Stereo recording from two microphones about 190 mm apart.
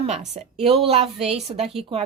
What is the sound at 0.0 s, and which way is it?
A woman's voice, 35° right (ahead or behind).